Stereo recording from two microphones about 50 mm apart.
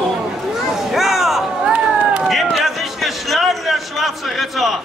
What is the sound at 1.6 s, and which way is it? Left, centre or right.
Run, centre.